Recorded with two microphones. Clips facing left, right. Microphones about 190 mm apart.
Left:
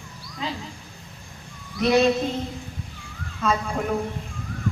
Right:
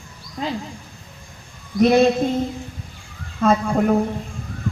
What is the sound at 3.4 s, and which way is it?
Speech, 50° right (ahead or behind).